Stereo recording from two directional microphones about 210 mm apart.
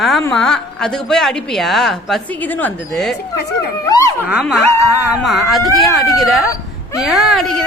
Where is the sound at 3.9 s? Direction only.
15° left (ahead or behind).